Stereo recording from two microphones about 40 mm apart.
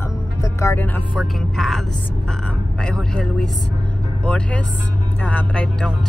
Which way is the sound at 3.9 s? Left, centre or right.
Left.